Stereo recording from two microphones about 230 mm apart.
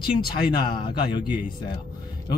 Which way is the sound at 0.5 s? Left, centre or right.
Centre.